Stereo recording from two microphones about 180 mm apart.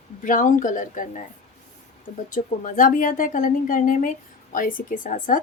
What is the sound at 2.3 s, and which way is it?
A woman's voice, 45° left (ahead or behind).